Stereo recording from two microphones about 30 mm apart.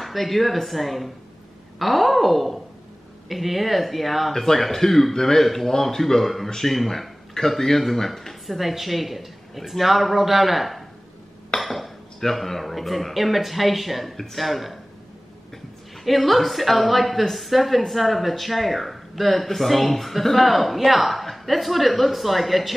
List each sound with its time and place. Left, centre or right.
0.0 s a woman's voice: centre
5.4 s speech: centre
8.5 s a woman's voice: centre
11.6 s dishes: centre
12.2 s a woman's voice: centre
16.0 s a woman's voice: centre